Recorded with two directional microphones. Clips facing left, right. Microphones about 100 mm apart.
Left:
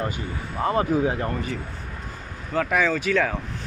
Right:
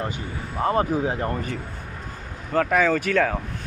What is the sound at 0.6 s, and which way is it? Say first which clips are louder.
Speech: even; 30° right (ahead or behind).